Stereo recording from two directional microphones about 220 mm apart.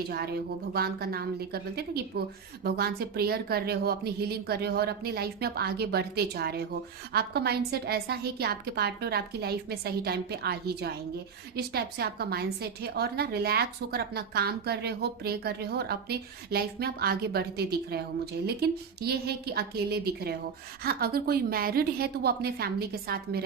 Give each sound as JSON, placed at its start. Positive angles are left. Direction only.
{"t": 0.1, "sound": "a woman's voice", "side_deg": -45}